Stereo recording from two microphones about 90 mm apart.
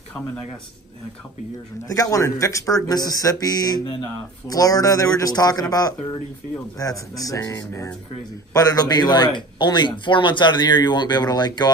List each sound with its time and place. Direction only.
1.9 s a man's voice: 40° left (ahead or behind)